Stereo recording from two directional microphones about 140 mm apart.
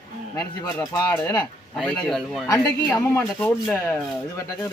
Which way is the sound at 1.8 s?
5° left (ahead or behind).